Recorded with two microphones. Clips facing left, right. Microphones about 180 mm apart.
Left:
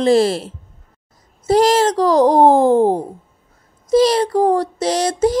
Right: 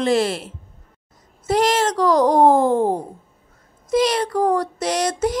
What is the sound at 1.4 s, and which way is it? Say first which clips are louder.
Speech: left 5 dB; 35° left (ahead or behind).